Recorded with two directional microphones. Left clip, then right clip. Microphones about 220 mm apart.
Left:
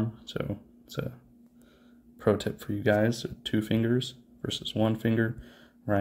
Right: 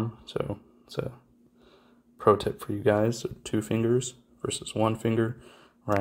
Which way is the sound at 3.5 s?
50° right (ahead or behind).